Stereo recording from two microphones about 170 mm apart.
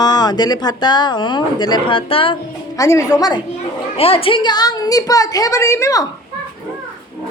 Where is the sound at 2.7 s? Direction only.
20° left (ahead or behind).